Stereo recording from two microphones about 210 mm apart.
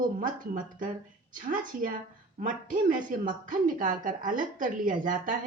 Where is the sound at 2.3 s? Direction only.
40° right (ahead or behind).